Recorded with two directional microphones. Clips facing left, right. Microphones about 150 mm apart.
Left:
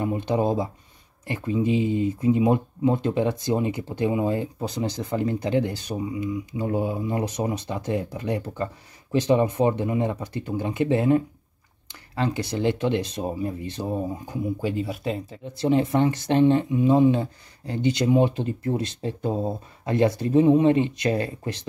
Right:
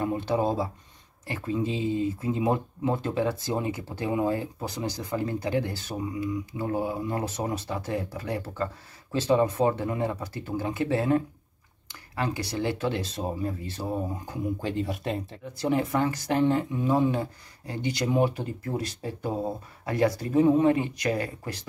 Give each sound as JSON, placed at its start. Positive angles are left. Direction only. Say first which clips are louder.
{"t": 0.0, "sound": "speech", "louder": "left 2 dB", "side_deg": 20}
{"t": 14.6, "sound": "speech", "louder": "left 3 dB", "side_deg": 5}
{"t": 15.4, "sound": "speech", "louder": "left 5 dB", "side_deg": 25}